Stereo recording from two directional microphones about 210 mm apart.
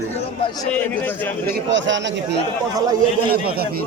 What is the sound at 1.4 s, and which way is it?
Speech, 60° right (ahead or behind).